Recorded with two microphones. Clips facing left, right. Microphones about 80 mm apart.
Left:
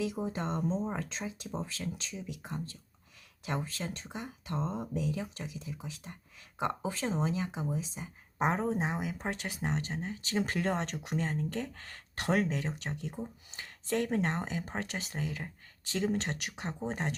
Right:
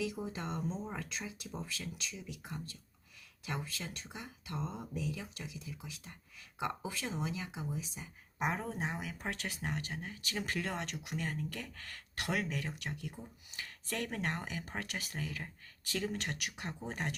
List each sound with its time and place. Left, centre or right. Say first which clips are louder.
0.0 s speech: left 5 dB; left